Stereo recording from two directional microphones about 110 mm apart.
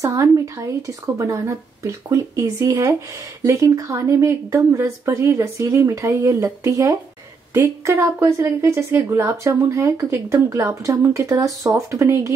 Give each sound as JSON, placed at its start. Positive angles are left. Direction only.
{"t": 0.0, "sound": "speech", "side_deg": -30}